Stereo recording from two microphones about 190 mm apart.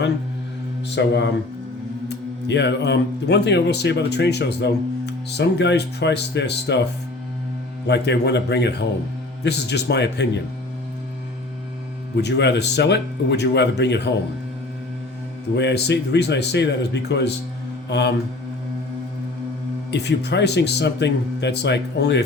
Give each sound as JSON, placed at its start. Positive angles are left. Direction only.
{"t": 0.9, "sound": "speech", "side_deg": 65}
{"t": 7.9, "sound": "speech", "side_deg": 65}
{"t": 12.1, "sound": "speech", "side_deg": 65}
{"t": 15.5, "sound": "speech", "side_deg": 65}
{"t": 17.8, "sound": "mantra", "side_deg": 65}
{"t": 19.9, "sound": "speech", "side_deg": 65}